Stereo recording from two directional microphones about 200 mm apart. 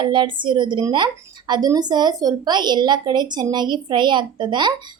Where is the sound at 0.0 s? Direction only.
25° right (ahead or behind).